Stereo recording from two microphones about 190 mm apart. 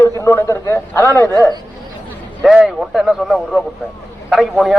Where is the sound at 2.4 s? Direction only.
Centre (ahead or behind).